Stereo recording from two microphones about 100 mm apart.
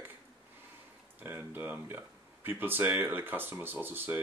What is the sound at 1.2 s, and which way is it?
Speech, 20° right (ahead or behind).